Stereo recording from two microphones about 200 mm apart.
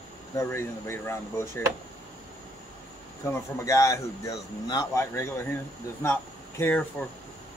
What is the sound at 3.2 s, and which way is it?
Speech, 15° left (ahead or behind).